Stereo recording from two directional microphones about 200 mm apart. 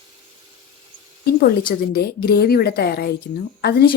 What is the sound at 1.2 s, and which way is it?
Speech, 50° left (ahead or behind).